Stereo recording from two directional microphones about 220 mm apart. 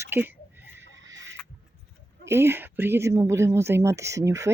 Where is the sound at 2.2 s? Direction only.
10° right (ahead or behind).